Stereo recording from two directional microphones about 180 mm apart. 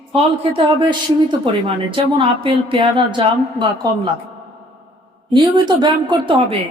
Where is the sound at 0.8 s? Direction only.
30° right (ahead or behind).